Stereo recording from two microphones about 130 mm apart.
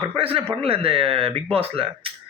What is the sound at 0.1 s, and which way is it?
A man's voice, 45° right (ahead or behind).